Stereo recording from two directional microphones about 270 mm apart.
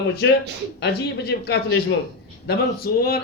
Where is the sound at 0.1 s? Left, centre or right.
Left.